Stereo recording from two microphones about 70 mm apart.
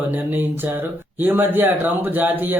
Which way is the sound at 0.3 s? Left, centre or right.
Right.